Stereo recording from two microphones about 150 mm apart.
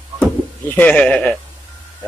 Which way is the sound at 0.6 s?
10° left (ahead or behind).